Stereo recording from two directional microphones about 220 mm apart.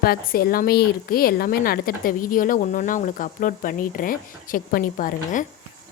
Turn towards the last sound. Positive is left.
turn(degrees=40)  # may be behind; listen again after turning